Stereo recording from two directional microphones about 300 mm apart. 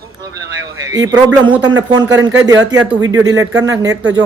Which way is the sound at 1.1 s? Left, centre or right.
Centre.